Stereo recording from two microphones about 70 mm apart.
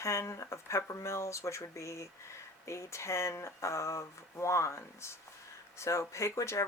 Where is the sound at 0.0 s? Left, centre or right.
Left.